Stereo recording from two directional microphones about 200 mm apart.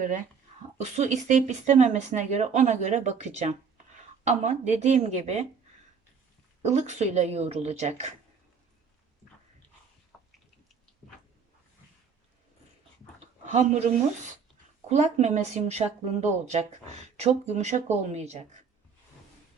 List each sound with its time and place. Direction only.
0.8 s speech: 35° right (ahead or behind)
6.7 s speech: 35° right (ahead or behind)
10.1 s drip: centre (ahead or behind)
13.4 s speech: 35° right (ahead or behind)
14.8 s speech: 35° right (ahead or behind)